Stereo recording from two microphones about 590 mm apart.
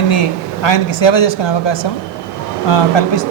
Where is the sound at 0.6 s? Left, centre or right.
Left.